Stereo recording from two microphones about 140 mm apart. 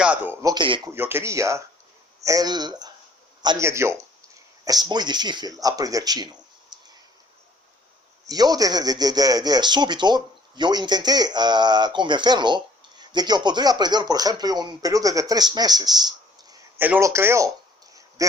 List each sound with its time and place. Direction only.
0.0 s a man's voice: 10° right (ahead or behind)
0.4 s speech: 35° right (ahead or behind)
0.9 s speech: 15° right (ahead or behind)
8.3 s speech: 25° right (ahead or behind)
16.7 s speech: 15° right (ahead or behind)